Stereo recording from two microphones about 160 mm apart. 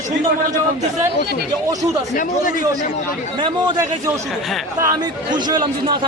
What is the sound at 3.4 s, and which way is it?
A man's voice, 30° right (ahead or behind).